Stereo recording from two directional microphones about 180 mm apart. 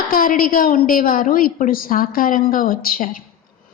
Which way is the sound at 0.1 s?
50° left (ahead or behind).